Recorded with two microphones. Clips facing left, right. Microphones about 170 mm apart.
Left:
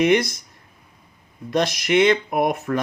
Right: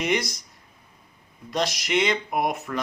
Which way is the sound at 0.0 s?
55° left (ahead or behind).